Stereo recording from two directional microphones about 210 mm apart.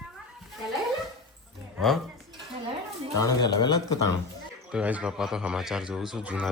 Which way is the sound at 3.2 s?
20° left (ahead or behind).